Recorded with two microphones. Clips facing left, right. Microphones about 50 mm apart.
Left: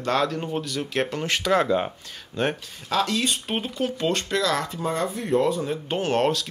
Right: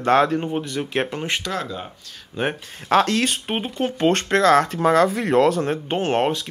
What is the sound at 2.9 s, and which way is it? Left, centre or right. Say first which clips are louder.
Speech: right 6 dB; right.